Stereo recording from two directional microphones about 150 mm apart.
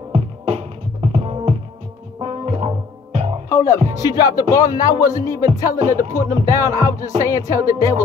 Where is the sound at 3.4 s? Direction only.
20° left (ahead or behind).